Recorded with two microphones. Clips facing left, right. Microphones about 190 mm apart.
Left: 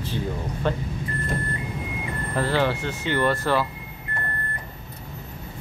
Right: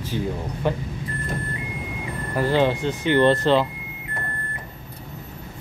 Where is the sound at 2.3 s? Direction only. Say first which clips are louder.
Right 3 dB; 15° right (ahead or behind).